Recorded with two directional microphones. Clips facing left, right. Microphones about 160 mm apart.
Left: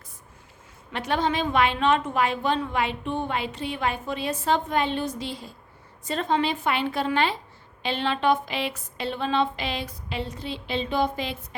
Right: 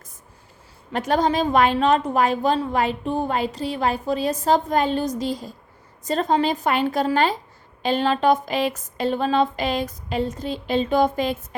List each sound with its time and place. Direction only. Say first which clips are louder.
0.9 s a woman's voice: right 5 dB; 40° right (ahead or behind)